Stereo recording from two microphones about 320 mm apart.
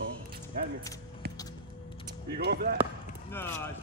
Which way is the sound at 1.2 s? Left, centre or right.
Right.